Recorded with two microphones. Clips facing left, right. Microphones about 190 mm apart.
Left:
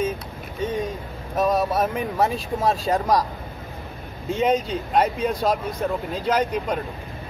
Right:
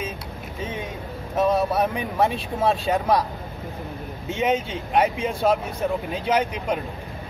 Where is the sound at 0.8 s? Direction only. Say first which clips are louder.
Left 2 dB; centre (ahead or behind).